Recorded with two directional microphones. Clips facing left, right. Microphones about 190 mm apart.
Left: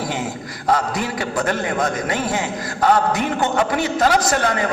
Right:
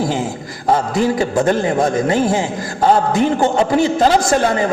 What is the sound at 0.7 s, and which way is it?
A man's voice, 30° right (ahead or behind).